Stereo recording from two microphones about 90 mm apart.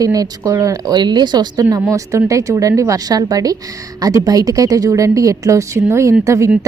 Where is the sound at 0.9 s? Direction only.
55° right (ahead or behind).